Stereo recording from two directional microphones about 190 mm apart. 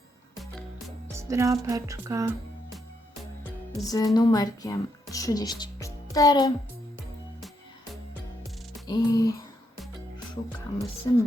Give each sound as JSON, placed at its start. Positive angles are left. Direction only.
{"t": 1.1, "sound": "music", "side_deg": -15}
{"t": 1.6, "sound": "a sound", "side_deg": -15}
{"t": 3.8, "sound": "a woman's voice", "side_deg": 20}
{"t": 8.9, "sound": "music", "side_deg": 20}
{"t": 11.1, "sound": "music", "side_deg": 25}